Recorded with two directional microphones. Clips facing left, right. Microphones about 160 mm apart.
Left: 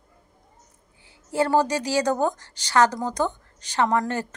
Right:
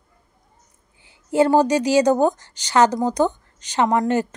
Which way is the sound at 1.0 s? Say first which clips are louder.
Right 6 dB; 15° right (ahead or behind).